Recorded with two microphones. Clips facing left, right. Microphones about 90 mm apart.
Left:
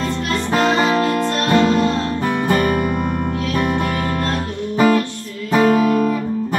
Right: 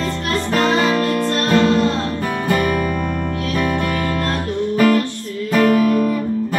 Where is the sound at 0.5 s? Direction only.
25° left (ahead or behind).